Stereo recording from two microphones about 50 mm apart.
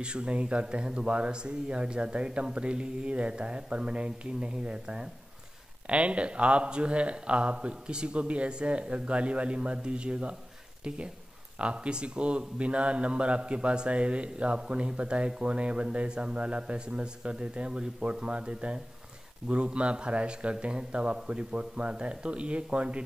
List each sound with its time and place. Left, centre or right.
0.0 s a man's voice: right
11.5 s a man's voice: right